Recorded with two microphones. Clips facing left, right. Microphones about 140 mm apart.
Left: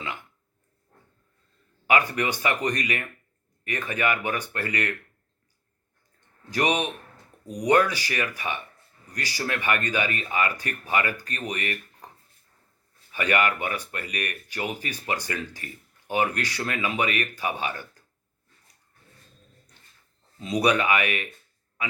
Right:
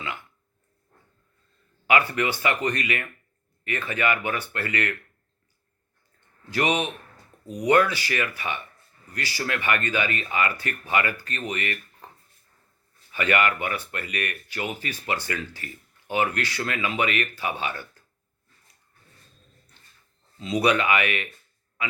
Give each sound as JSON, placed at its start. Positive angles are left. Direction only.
{"t": 0.0, "sound": "a sound", "side_deg": 15}
{"t": 1.9, "sound": "speech", "side_deg": 15}
{"t": 6.5, "sound": "speech", "side_deg": 15}
{"t": 13.2, "sound": "speech", "side_deg": 15}
{"t": 20.5, "sound": "speech", "side_deg": 15}